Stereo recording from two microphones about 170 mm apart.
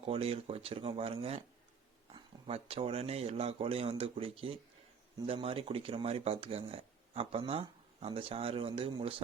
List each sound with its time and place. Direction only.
0.0 s speech: 35° right (ahead or behind)